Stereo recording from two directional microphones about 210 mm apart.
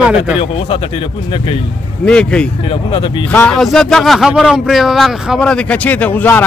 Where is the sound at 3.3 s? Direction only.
5° left (ahead or behind).